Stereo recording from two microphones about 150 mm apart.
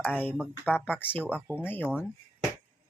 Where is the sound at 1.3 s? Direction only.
10° right (ahead or behind).